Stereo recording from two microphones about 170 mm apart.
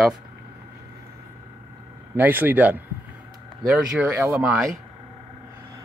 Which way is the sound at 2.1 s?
10° right (ahead or behind).